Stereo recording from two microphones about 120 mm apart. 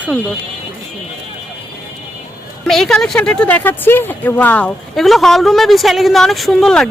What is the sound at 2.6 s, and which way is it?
Speech, 5° left (ahead or behind).